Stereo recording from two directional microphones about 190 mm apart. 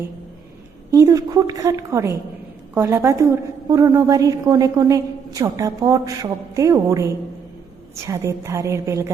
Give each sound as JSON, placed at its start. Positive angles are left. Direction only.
{"t": 0.9, "sound": "a woman's voice", "side_deg": -15}